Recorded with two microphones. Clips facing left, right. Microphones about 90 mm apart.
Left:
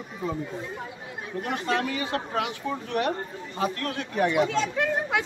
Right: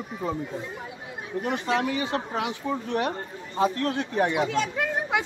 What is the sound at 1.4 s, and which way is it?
Speech, 10° right (ahead or behind).